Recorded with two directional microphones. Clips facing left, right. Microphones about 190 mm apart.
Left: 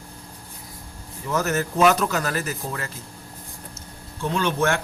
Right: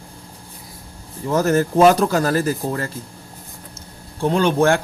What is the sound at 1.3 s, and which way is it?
Speech, 30° right (ahead or behind).